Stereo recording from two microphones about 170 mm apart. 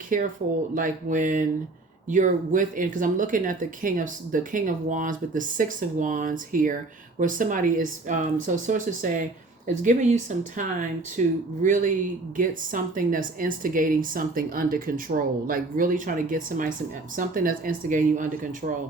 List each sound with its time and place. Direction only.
0.1 s speech: 55° right (ahead or behind)